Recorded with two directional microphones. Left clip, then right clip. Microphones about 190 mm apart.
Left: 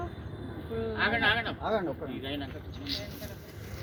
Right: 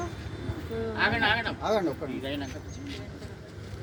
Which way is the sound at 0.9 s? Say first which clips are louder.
Right 2 dB; 55° right (ahead or behind).